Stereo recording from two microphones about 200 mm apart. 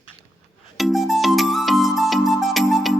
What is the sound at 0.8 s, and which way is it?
Music, centre (ahead or behind).